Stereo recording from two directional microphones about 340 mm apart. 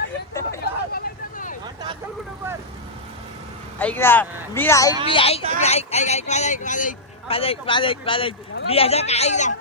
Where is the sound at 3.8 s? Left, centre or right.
Centre.